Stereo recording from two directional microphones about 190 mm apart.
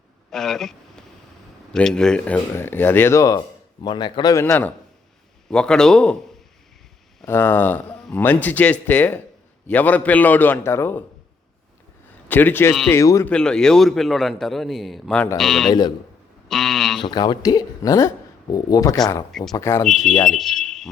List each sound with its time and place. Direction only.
0.3 s a man's voice: centre (ahead or behind)
7.2 s speech: 10° left (ahead or behind)
12.3 s speech: 10° left (ahead or behind)
13.3 s a man's voice: 5° left (ahead or behind)
17.0 s speech: 20° left (ahead or behind)
19.3 s a man's voice: centre (ahead or behind)
19.5 s speech: 15° left (ahead or behind)
19.8 s a man's voice: centre (ahead or behind)
20.4 s a sound: centre (ahead or behind)